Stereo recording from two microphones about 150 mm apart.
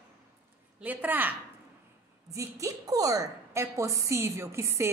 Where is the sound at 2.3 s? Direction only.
20° right (ahead or behind).